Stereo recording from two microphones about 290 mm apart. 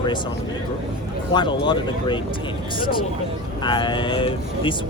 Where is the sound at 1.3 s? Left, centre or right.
Centre.